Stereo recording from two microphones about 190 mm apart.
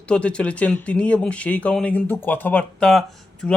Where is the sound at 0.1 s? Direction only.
5° left (ahead or behind).